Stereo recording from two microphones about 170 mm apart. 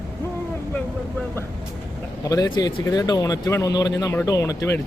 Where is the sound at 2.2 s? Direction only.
20° left (ahead or behind).